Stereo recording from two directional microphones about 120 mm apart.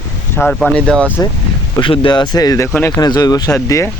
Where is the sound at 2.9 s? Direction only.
35° left (ahead or behind).